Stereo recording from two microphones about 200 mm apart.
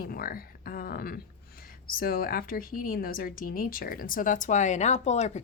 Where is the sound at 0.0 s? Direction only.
45° left (ahead or behind).